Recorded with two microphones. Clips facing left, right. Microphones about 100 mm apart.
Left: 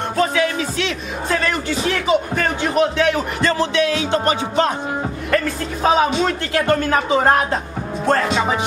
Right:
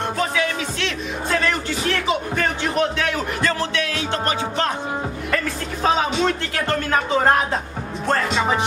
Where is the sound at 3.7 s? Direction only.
20° left (ahead or behind).